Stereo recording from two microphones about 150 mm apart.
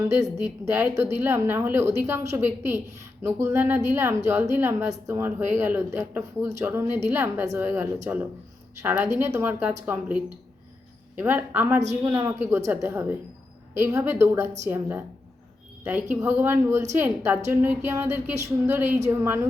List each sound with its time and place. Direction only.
0.2 s a woman's voice: 20° right (ahead or behind)